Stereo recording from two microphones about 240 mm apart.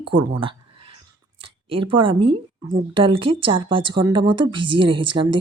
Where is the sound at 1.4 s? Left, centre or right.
Right.